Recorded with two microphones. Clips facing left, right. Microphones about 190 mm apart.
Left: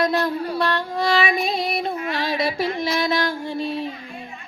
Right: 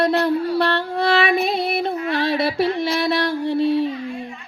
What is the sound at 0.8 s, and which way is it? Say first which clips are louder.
Music: right 2 dB; 60° right (ahead or behind).